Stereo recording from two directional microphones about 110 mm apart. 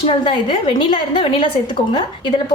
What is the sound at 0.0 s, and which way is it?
A woman's voice, 50° left (ahead or behind).